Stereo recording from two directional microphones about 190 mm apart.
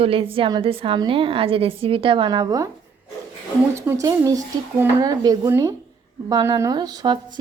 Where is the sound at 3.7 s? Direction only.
15° right (ahead or behind).